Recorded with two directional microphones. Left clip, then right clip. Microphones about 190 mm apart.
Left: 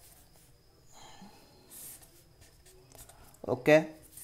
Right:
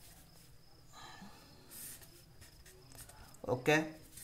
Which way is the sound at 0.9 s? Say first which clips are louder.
Even; 10° left (ahead or behind).